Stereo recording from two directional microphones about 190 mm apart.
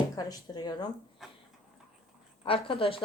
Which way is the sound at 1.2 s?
Centre (ahead or behind).